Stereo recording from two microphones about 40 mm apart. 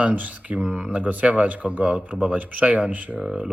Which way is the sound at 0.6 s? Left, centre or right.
Right.